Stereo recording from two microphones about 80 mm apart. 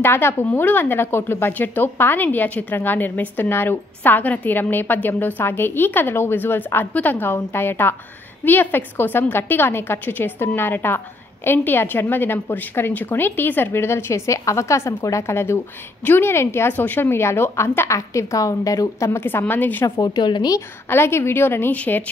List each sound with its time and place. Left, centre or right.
0.0 s a woman's voice: left
20.0 s speech: left
20.9 s a woman's voice: left